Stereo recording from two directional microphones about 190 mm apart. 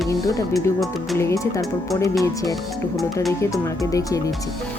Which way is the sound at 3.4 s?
15° left (ahead or behind).